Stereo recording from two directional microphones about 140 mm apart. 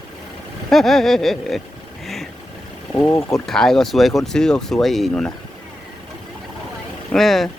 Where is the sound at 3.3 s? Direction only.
5° left (ahead or behind).